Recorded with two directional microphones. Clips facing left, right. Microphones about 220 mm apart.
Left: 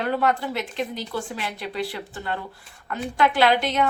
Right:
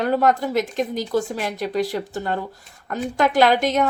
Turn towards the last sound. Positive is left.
turn(degrees=-45)  # may be behind; listen again after turning